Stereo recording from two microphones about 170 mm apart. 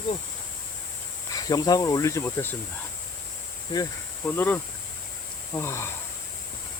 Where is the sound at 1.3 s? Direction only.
20° left (ahead or behind).